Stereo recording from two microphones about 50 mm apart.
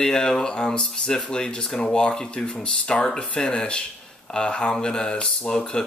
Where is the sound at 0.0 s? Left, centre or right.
Centre.